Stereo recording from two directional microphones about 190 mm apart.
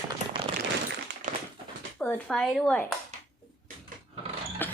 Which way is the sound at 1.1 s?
65° right (ahead or behind).